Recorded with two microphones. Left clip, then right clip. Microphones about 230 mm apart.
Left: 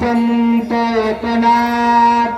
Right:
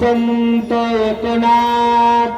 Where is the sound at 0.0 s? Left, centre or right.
Right.